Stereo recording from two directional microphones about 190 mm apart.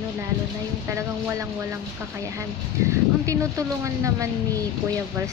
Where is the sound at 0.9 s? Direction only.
15° right (ahead or behind).